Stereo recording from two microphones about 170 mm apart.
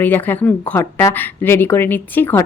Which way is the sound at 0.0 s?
10° left (ahead or behind).